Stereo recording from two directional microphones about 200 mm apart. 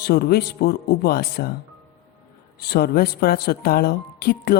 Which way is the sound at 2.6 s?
50° left (ahead or behind).